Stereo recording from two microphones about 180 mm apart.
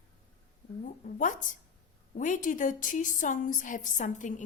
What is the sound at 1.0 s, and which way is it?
A woman's voice, 45° left (ahead or behind).